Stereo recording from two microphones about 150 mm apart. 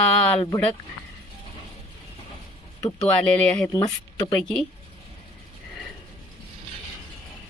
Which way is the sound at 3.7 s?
30° left (ahead or behind).